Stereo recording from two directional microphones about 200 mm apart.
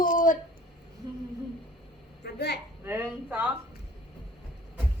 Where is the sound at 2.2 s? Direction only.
55° left (ahead or behind).